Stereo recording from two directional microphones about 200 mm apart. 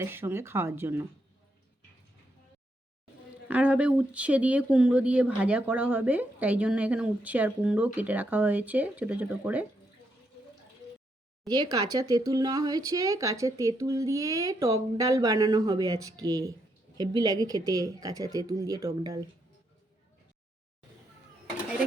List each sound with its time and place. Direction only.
0.0 s speech: 10° right (ahead or behind)
3.5 s speech: 5° right (ahead or behind)
11.4 s speech: 20° right (ahead or behind)